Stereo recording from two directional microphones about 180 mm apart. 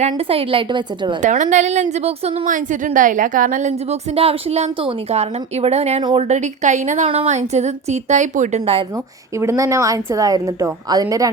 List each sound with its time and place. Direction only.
0.0 s a woman's voice: 30° right (ahead or behind)
1.2 s a woman's voice: 45° right (ahead or behind)
6.0 s a woman's voice: 25° right (ahead or behind)
6.2 s a woman's voice: 40° right (ahead or behind)
9.4 s a woman's voice: 15° right (ahead or behind)